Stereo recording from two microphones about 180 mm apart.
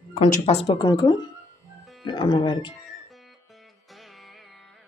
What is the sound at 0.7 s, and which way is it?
Speech, 25° left (ahead or behind).